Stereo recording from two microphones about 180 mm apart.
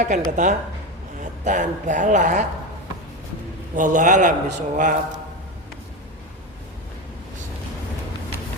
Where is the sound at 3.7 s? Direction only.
45° right (ahead or behind).